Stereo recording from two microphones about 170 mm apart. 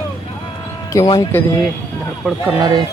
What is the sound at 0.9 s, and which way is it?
Speech, 25° left (ahead or behind).